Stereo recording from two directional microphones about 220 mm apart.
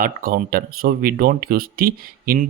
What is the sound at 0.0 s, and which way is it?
Speech, 40° right (ahead or behind).